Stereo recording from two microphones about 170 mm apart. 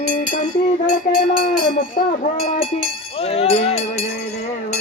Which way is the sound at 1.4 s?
55° left (ahead or behind).